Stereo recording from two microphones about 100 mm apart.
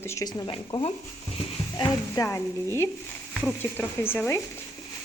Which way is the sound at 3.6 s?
20° left (ahead or behind).